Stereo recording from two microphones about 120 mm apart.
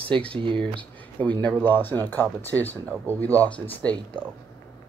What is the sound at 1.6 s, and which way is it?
Speech, 15° left (ahead or behind).